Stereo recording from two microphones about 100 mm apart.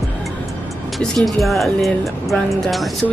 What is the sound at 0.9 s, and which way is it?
Speech, 5° left (ahead or behind).